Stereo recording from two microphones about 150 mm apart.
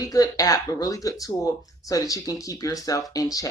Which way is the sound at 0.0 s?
25° left (ahead or behind).